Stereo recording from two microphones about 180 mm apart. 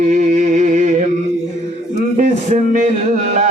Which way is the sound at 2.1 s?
45° right (ahead or behind).